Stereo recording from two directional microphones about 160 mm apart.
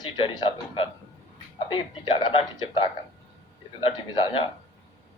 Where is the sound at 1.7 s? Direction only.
30° left (ahead or behind).